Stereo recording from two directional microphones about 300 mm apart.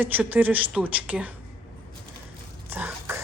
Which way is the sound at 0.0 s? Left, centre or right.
Centre.